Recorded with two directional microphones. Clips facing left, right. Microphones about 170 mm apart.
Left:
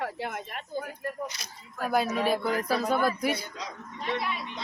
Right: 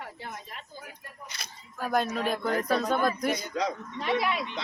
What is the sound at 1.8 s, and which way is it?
Speech, 5° left (ahead or behind).